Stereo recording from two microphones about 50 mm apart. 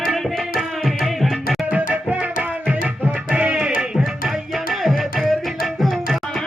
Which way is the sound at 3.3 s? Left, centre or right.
Right.